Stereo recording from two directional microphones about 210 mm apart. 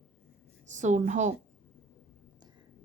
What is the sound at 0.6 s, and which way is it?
Speech, 35° right (ahead or behind).